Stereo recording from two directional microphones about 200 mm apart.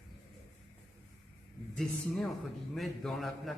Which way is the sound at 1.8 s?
Centre (ahead or behind).